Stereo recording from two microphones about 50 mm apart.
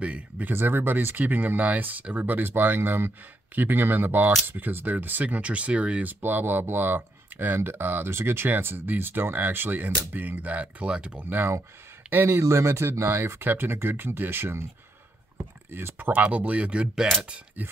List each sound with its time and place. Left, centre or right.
0.0 s speech: right
0.5 s speech: right
6.2 s speech: right
11.2 s speech: right
15.3 s a sound: right
16.0 s speech: right; by 17.1 s centre
17.6 s speech: right